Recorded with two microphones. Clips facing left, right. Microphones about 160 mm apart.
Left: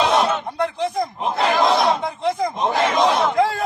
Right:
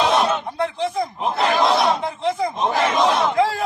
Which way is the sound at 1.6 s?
Centre (ahead or behind).